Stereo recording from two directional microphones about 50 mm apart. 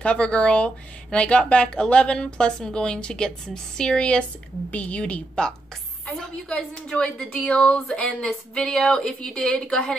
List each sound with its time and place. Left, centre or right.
0.0 s a woman's voice: left
8.3 s a woman's voice: centre